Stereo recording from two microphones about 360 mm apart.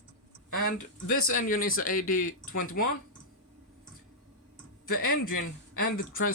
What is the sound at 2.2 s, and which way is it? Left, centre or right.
Speech, left.